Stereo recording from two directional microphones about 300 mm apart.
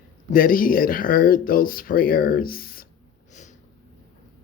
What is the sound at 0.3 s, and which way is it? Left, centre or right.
Speech, left.